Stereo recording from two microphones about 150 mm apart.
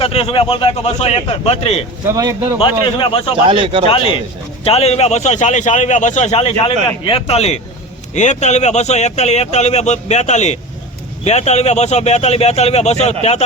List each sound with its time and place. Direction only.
0.0 s a man's voice: 40° left (ahead or behind)
2.0 s speech: 20° right (ahead or behind)
2.6 s a man's voice: 35° left (ahead or behind)
3.5 s speech: 35° right (ahead or behind)
4.6 s speech: 45° left (ahead or behind)